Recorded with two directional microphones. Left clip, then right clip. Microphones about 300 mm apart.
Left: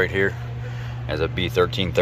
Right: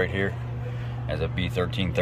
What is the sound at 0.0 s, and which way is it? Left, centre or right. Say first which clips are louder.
Speech: left 6 dB; centre.